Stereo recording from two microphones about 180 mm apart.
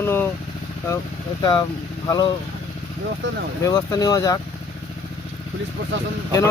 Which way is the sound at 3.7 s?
20° left (ahead or behind).